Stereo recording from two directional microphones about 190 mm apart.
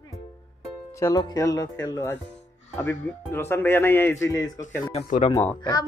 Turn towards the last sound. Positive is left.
turn(degrees=20)  # may be behind; listen again after turning